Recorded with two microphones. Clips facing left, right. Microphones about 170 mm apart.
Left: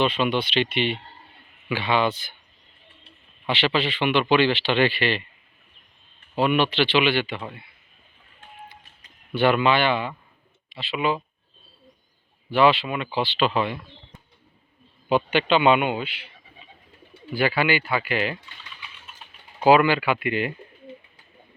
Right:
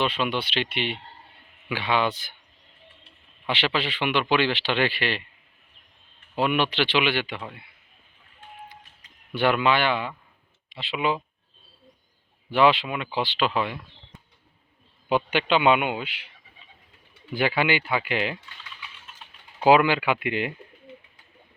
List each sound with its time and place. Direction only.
0.0 s speech: 10° right (ahead or behind)
3.5 s speech: 10° right (ahead or behind)
6.3 s speech: 10° right (ahead or behind)
9.3 s speech: 10° right (ahead or behind)
12.5 s speech: 15° right (ahead or behind)
15.1 s speech: 10° right (ahead or behind)
17.3 s speech: 20° right (ahead or behind)
19.6 s speech: 15° right (ahead or behind)